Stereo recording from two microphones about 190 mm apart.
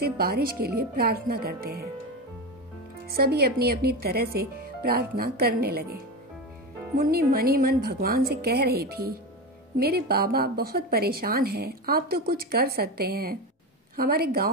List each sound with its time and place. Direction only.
0.0 s a woman's voice: 55° right (ahead or behind)
3.1 s a woman's voice: 55° right (ahead or behind)
7.1 s a woman's voice: 55° right (ahead or behind)